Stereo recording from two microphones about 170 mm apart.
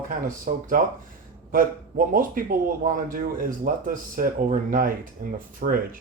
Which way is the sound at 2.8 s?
55° right (ahead or behind).